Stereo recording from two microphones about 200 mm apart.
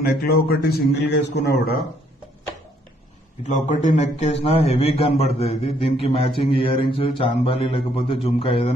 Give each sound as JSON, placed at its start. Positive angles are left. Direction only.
{"t": 0.0, "sound": "a man's voice", "side_deg": 50}
{"t": 3.5, "sound": "a man's voice", "side_deg": 40}